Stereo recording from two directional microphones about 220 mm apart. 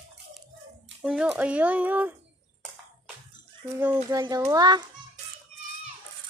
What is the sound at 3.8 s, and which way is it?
Speech, 10° right (ahead or behind).